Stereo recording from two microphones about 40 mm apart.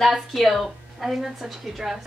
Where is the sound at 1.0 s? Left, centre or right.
Centre.